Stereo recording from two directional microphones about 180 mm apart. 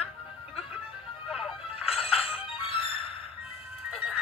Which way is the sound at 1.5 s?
30° left (ahead or behind).